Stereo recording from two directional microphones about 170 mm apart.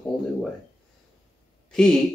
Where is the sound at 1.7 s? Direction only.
5° left (ahead or behind).